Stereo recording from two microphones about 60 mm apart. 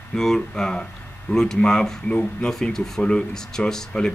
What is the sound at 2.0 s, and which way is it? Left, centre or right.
Speech, centre.